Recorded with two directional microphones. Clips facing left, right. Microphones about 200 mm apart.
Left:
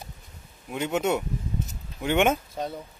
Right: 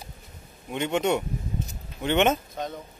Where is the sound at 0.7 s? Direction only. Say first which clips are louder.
Right 1 dB; 5° left (ahead or behind).